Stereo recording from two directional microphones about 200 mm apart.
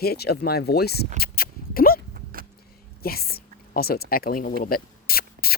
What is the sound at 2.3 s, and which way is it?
Vehicle, 45° right (ahead or behind).